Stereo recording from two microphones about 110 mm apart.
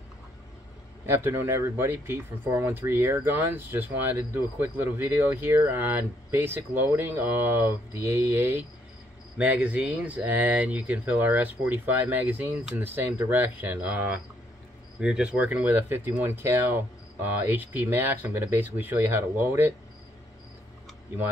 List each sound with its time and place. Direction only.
1.0 s speech: 20° right (ahead or behind)